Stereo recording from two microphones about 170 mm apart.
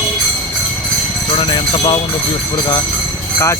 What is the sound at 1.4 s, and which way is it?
Speech, 30° left (ahead or behind).